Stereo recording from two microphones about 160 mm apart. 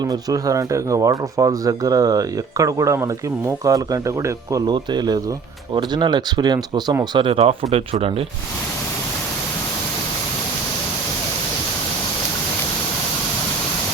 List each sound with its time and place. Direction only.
0.0 s speech: 25° right (ahead or behind); by 8.1 s 40° right (ahead or behind)